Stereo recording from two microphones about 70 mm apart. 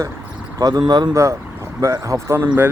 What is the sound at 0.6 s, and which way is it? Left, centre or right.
Speech, right.